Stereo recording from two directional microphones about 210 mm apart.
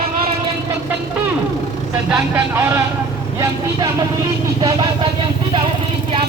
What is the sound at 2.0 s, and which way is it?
Speech, 10° right (ahead or behind).